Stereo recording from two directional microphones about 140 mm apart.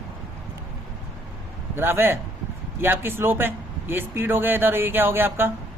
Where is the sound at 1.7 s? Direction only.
15° right (ahead or behind).